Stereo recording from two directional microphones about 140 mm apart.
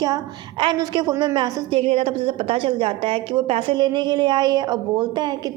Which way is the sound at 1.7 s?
45° right (ahead or behind).